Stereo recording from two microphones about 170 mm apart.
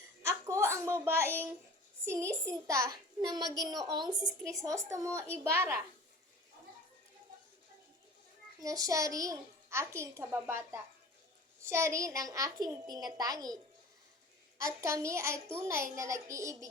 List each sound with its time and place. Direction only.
0.2 s a sound: 15° right (ahead or behind)
2.0 s a child's voice: 15° right (ahead or behind)
8.5 s a child's voice: 20° right (ahead or behind)
14.6 s a child's voice: 20° right (ahead or behind)